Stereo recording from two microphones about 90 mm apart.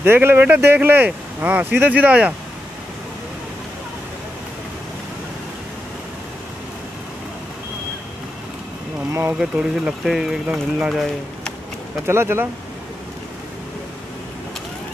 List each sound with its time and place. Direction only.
0.0 s speech: 25° right (ahead or behind)
9.4 s speech: 10° right (ahead or behind)
12.1 s speech: 25° right (ahead or behind)